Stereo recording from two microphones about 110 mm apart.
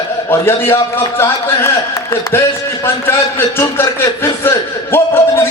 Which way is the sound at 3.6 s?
25° left (ahead or behind).